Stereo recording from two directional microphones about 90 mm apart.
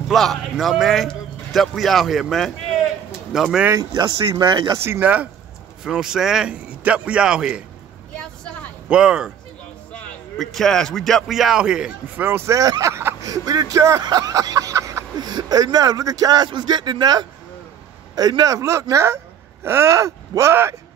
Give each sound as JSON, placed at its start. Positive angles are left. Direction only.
{"t": 0.1, "sound": "a man's voice", "side_deg": 0}
{"t": 3.7, "sound": "speech", "side_deg": -50}
{"t": 4.7, "sound": "speech", "side_deg": -30}
{"t": 5.0, "sound": "a man's voice", "side_deg": -15}
{"t": 5.9, "sound": "a man's voice", "side_deg": -5}
{"t": 8.8, "sound": "a man's voice", "side_deg": -10}
{"t": 10.3, "sound": "a man's voice", "side_deg": 0}
{"t": 12.2, "sound": "speech", "side_deg": -25}
{"t": 12.5, "sound": "speech", "side_deg": -40}
{"t": 14.0, "sound": "a sound", "side_deg": -45}
{"t": 15.1, "sound": "speech", "side_deg": -50}